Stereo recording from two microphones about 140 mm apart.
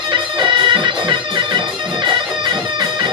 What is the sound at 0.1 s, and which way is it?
Music, 35° right (ahead or behind).